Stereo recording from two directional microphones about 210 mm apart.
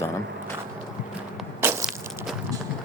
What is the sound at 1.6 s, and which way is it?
Crushing, 10° right (ahead or behind).